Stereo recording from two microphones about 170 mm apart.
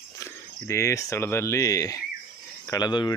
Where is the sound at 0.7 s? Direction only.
15° left (ahead or behind).